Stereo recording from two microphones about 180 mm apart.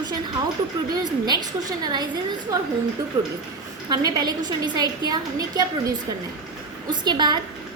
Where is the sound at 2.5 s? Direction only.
15° right (ahead or behind).